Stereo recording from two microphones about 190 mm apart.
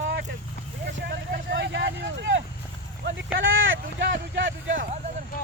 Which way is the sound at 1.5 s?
70° right (ahead or behind).